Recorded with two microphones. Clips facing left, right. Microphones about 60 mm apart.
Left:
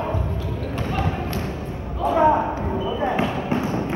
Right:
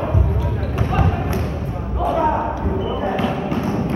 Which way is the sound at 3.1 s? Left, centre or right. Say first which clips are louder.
Right 2 dB; left.